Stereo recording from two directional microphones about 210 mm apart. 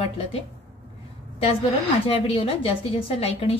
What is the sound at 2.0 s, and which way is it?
A woman's voice, 25° left (ahead or behind).